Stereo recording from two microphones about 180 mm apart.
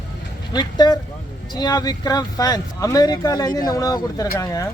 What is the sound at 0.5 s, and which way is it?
Speech, 25° left (ahead or behind).